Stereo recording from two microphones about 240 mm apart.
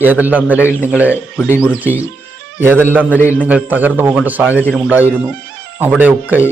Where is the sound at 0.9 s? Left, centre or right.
Centre.